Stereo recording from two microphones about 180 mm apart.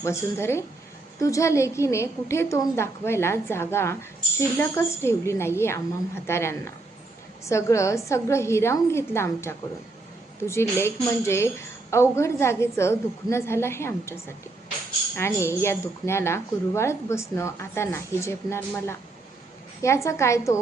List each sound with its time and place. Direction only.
0.0 s a woman's voice: 15° left (ahead or behind)